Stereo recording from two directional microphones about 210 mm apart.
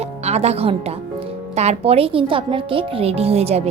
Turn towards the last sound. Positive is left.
turn(degrees=-30)  # may be behind; listen again after turning